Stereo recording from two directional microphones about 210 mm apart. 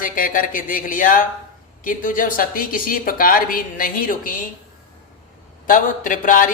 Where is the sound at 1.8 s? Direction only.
40° left (ahead or behind).